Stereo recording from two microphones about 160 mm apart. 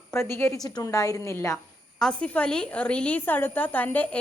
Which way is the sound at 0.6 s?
20° left (ahead or behind).